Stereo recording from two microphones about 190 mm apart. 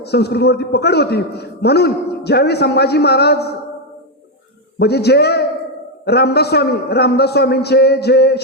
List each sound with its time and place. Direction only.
0.0 s a man's voice: 60° left (ahead or behind)
4.8 s a man's voice: 60° left (ahead or behind)